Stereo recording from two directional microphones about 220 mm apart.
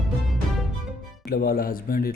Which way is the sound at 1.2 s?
45° left (ahead or behind).